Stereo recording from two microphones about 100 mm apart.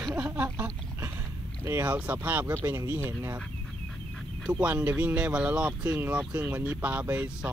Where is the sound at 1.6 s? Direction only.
25° right (ahead or behind).